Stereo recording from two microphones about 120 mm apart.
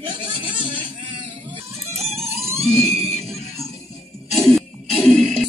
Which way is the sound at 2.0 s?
60° right (ahead or behind).